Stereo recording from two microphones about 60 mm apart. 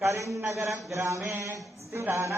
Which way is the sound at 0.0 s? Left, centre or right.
Right.